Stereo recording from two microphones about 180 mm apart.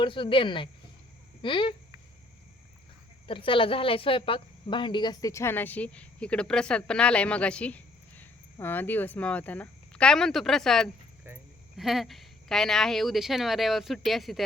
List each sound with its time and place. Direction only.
0.0 s speech: 30° left (ahead or behind)
3.2 s a woman's voice: 30° left (ahead or behind); by 10.8 s centre (ahead or behind)
11.3 s a sound: 10° right (ahead or behind)
11.8 s a woman's voice: centre (ahead or behind)